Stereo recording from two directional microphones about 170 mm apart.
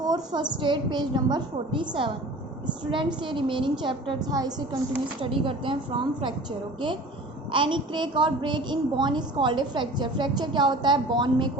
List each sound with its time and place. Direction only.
0.0 s a woman's voice: 25° right (ahead or behind)
7.5 s a woman's voice: 30° right (ahead or behind)